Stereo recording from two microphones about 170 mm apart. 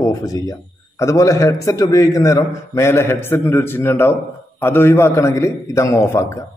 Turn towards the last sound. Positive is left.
turn(degrees=15)  # may be behind; listen again after turning